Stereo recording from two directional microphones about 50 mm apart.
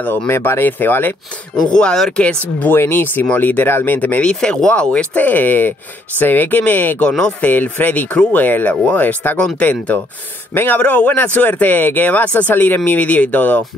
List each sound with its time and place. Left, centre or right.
0.3 s speech: left
1.6 s speech: centre
2.9 s speech: left
4.2 s speech: centre
5.2 s speech: left
7.1 s speech: centre
7.4 s speech: left
10.5 s a man's voice: left
10.8 s speech: left